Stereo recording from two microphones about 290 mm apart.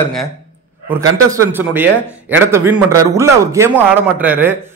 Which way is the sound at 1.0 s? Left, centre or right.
Centre.